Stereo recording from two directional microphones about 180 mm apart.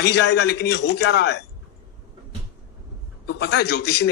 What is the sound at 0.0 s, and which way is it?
A man's voice, 70° left (ahead or behind).